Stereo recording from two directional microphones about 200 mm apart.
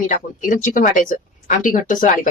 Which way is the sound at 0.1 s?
40° left (ahead or behind).